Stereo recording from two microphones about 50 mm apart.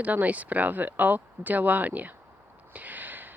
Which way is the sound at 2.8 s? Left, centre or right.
Right.